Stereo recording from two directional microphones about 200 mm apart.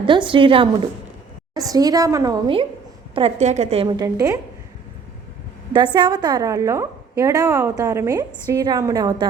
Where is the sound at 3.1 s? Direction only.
30° right (ahead or behind); by 4.4 s 15° right (ahead or behind).